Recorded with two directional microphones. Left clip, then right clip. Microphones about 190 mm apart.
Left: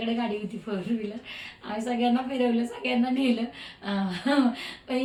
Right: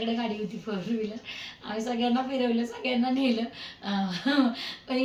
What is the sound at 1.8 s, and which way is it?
A woman's voice, 5° left (ahead or behind).